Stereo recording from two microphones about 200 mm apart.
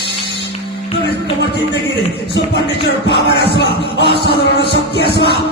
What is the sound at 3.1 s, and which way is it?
Music, 55° left (ahead or behind).